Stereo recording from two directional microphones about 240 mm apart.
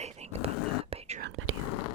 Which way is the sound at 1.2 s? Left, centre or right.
Right.